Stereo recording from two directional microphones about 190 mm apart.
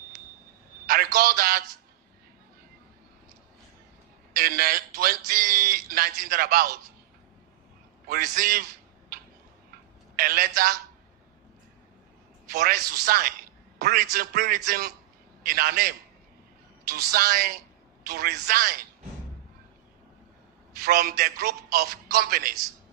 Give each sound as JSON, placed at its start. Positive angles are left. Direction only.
{"t": 0.9, "sound": "a man's voice", "side_deg": -50}
{"t": 4.4, "sound": "a man's voice", "side_deg": -50}
{"t": 8.0, "sound": "a man's voice", "side_deg": -50}
{"t": 10.2, "sound": "a man's voice", "side_deg": -50}
{"t": 12.5, "sound": "a man's voice", "side_deg": -55}
{"t": 17.1, "sound": "a man's voice", "side_deg": -50}
{"t": 20.7, "sound": "a man's voice", "side_deg": -50}